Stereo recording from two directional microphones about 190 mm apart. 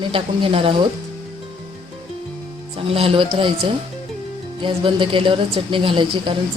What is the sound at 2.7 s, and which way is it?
Speech, 30° right (ahead or behind).